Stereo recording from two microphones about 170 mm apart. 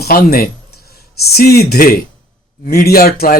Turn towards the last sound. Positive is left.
turn(degrees=65)  # may be behind; listen again after turning